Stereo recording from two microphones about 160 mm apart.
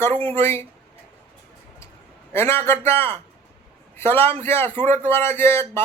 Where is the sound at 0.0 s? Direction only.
10° left (ahead or behind).